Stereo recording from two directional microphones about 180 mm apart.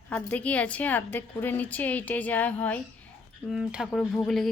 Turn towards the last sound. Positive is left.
turn(degrees=0)  # may be behind; listen again after turning